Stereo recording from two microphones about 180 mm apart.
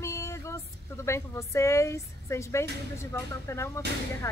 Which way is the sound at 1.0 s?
15° left (ahead or behind).